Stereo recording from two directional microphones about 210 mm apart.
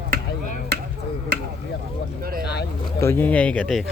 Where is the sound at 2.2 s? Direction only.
45° right (ahead or behind).